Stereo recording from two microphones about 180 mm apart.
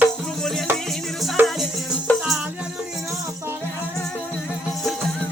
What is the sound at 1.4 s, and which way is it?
Music, 10° right (ahead or behind).